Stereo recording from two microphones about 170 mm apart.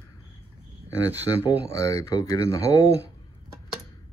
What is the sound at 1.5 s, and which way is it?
Speech, 20° left (ahead or behind).